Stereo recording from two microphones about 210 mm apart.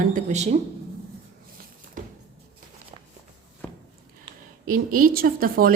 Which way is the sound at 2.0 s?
40° right (ahead or behind).